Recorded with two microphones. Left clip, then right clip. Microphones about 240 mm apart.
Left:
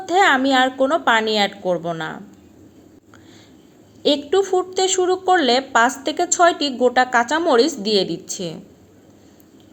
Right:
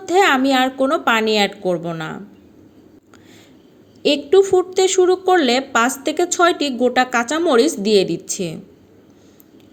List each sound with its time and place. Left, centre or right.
0.0 s a woman's voice: right
4.0 s a woman's voice: right